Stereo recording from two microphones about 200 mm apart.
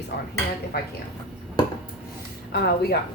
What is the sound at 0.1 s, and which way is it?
Speech, 55° left (ahead or behind).